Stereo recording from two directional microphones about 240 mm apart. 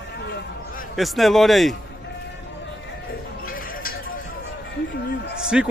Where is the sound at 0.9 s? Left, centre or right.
Centre.